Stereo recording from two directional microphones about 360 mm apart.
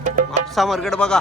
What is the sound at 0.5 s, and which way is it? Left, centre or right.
Speech, centre.